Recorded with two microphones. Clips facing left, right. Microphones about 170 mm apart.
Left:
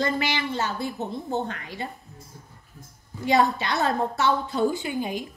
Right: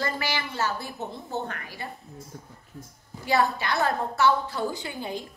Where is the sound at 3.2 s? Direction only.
20° left (ahead or behind).